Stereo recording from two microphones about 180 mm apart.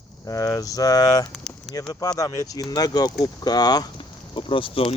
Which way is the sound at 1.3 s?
Centre (ahead or behind).